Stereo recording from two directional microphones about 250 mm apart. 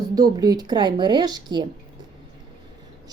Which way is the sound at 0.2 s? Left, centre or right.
Centre.